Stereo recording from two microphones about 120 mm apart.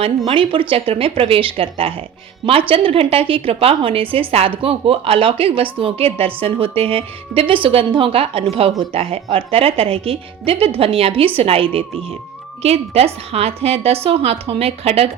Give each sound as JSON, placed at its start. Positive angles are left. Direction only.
{"t": 0.3, "sound": "a woman's voice", "side_deg": -45}